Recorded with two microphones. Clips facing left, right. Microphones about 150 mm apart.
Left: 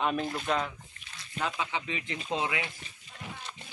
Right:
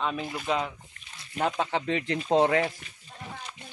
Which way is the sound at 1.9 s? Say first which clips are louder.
Right 9 dB; 65° right (ahead or behind).